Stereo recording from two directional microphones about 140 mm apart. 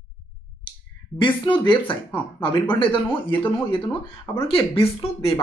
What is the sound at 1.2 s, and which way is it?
Speech, 35° left (ahead or behind).